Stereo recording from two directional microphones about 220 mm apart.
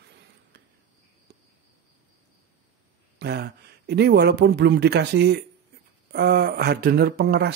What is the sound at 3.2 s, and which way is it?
Speech, 45° right (ahead or behind).